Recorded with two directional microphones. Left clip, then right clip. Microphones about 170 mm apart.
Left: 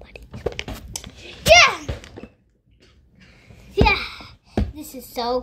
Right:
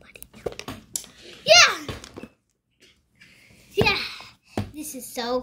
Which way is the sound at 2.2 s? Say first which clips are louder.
Left 1 dB; 10° left (ahead or behind).